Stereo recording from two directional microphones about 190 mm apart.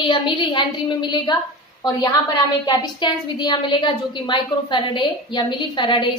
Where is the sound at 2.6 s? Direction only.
25° left (ahead or behind).